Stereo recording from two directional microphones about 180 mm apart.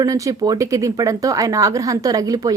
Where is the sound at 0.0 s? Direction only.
20° right (ahead or behind).